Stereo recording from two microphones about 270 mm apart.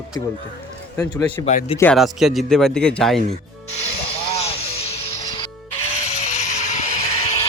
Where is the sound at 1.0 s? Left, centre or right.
Centre.